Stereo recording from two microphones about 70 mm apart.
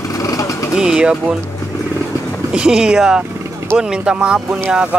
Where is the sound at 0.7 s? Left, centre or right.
Centre.